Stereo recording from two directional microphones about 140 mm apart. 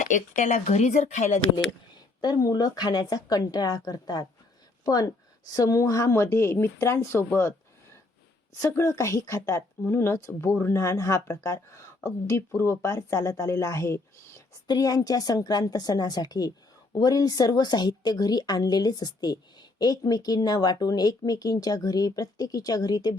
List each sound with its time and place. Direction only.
0.1 s speech: 65° left (ahead or behind)
2.2 s speech: 25° left (ahead or behind)
8.6 s speech: 20° left (ahead or behind)